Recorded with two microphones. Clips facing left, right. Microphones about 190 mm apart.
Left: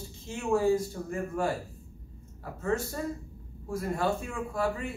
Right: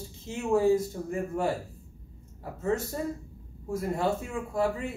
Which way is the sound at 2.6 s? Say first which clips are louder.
Right 1 dB; 20° right (ahead or behind).